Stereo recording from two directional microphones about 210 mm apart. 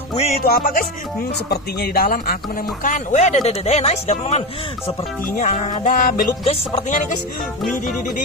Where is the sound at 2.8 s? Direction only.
35° left (ahead or behind).